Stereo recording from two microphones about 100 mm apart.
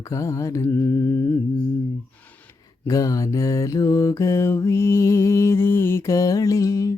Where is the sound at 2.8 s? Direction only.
35° left (ahead or behind).